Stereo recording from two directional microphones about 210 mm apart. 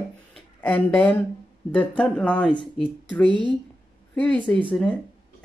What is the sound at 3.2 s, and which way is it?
Speech, 20° right (ahead or behind).